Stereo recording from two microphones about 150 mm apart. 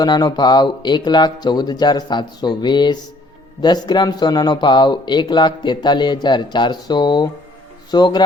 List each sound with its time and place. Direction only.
0.0 s speech: 25° left (ahead or behind)